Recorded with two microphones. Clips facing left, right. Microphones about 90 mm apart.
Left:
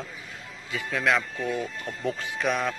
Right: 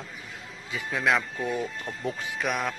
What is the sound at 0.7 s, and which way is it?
Speech, 20° right (ahead or behind).